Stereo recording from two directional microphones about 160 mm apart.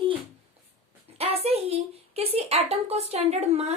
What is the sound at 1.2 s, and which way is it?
A woman's voice, 40° right (ahead or behind).